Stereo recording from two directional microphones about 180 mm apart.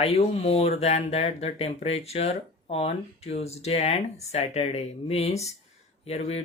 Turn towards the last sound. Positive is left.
turn(degrees=35)  # may be behind; listen again after turning